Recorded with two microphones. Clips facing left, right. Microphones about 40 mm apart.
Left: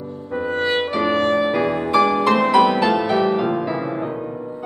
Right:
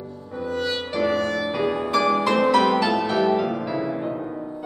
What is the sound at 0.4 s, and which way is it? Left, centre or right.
Music, left.